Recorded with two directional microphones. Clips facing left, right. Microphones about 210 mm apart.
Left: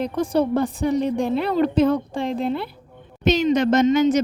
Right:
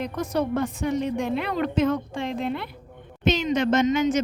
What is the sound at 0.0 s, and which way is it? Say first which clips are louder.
A woman's voice: left 5 dB; 30° left (ahead or behind).